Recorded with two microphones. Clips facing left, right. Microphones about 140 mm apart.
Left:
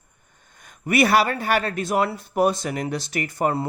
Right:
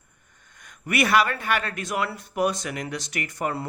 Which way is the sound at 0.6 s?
30° left (ahead or behind).